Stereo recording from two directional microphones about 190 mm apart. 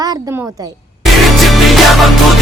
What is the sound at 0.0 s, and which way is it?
Speech, 15° right (ahead or behind).